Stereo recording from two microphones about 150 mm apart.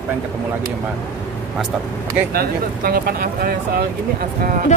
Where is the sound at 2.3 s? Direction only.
90° right.